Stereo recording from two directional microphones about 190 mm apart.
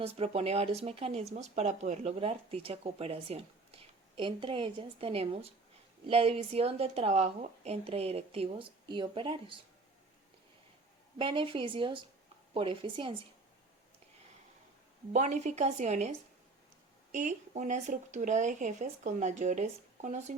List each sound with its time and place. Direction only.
0.0 s a woman's voice: 30° right (ahead or behind)
11.2 s a woman's voice: 25° right (ahead or behind)
15.1 s speech: 40° right (ahead or behind)